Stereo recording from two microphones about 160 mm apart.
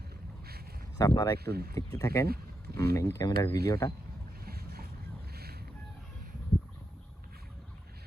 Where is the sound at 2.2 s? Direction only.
75° right (ahead or behind).